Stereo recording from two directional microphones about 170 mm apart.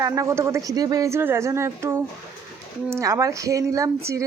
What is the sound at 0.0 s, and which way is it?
Speech, 15° right (ahead or behind).